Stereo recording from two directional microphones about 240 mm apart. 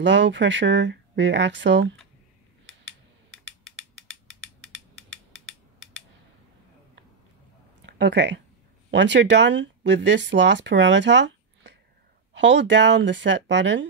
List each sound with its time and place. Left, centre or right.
0.0 s speech: right
7.8 s speech: right